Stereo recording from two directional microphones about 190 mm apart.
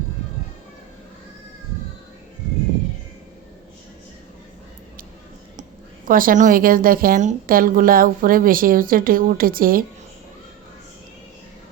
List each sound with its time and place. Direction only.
6.1 s a woman's voice: 45° right (ahead or behind)